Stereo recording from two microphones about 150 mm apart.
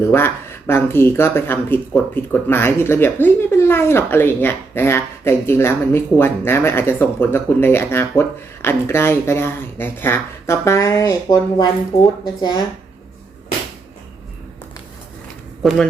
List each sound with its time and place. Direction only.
0.0 s speech: 15° left (ahead or behind)
15.6 s speech: centre (ahead or behind)